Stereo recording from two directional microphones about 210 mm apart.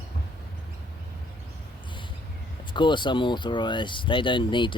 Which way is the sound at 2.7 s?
20° left (ahead or behind).